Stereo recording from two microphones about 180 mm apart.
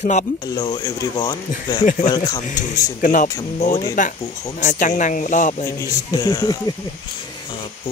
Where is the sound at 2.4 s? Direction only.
45° left (ahead or behind).